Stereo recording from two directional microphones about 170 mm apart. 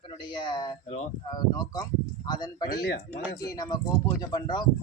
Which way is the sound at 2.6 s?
55° left (ahead or behind).